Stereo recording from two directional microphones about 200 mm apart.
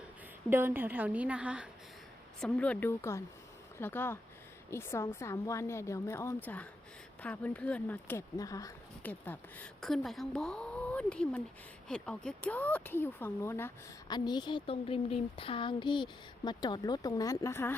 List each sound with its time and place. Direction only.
0.5 s a woman's voice: 10° right (ahead or behind)
2.4 s speech: 5° left (ahead or behind)